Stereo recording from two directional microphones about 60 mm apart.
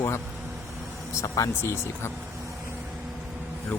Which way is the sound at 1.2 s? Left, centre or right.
Left.